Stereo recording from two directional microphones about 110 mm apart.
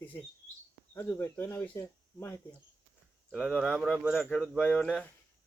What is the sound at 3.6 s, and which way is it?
Speech, centre (ahead or behind).